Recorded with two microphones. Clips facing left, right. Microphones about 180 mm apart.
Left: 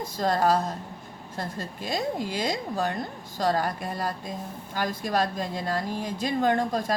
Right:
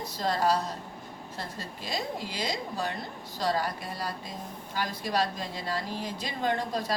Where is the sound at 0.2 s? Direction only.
50° left (ahead or behind).